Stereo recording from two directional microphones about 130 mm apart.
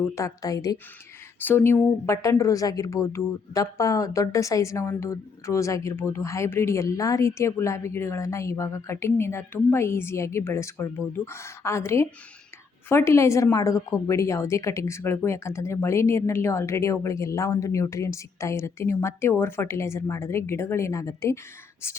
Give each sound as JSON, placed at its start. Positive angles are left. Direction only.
{"t": 0.2, "sound": "speech", "side_deg": 25}
{"t": 1.4, "sound": "speech", "side_deg": 15}